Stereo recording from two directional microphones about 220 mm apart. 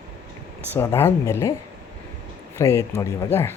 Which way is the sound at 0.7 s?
10° left (ahead or behind).